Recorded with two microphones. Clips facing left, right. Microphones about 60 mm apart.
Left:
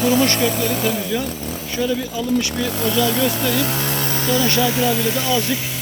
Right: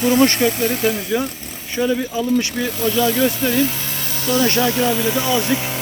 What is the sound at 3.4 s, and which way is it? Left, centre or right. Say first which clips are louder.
Speech: right 2 dB; left.